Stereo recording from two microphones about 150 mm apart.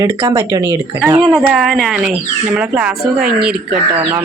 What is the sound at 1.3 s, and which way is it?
Speech, centre (ahead or behind).